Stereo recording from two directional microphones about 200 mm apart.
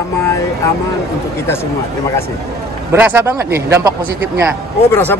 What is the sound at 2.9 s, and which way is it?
A man's voice, 10° right (ahead or behind).